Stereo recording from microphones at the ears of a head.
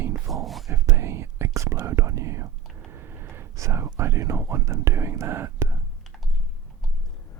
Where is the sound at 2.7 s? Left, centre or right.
Right.